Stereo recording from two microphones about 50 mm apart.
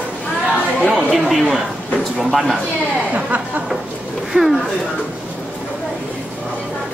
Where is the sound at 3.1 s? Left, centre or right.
Right.